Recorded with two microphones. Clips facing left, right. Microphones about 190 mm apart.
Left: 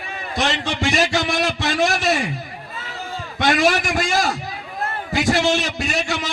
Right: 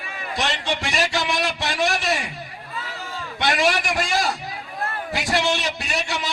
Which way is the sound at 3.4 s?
45° left (ahead or behind).